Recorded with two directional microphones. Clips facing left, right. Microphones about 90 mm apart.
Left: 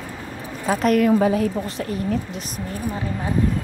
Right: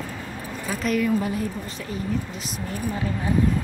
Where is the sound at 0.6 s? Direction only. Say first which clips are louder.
Left 6 dB; 55° left (ahead or behind); by 1.9 s 80° left.